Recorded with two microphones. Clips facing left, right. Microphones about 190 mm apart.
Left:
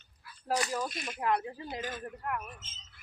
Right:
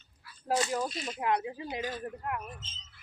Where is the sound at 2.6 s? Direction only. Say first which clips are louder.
Right 4 dB; 50° left (ahead or behind).